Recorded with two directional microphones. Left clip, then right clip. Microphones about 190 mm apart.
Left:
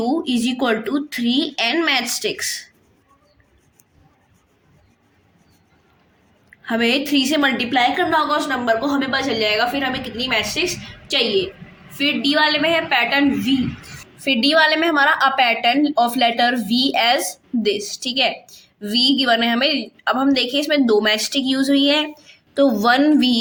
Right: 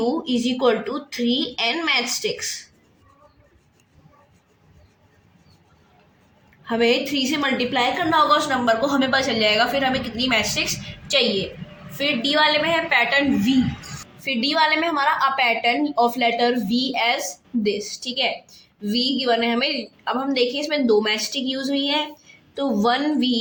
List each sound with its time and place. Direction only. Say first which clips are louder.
0.0 s a woman's voice: left 2 dB; 35° left (ahead or behind)
6.7 s a woman's voice: left 1 dB; 35° left (ahead or behind); by 13.5 s 15° left (ahead or behind)
14.3 s a woman's voice: left 4 dB; 30° left (ahead or behind)